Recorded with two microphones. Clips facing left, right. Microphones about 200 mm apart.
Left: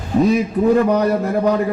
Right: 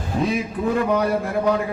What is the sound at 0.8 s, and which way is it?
Speech, 40° left (ahead or behind).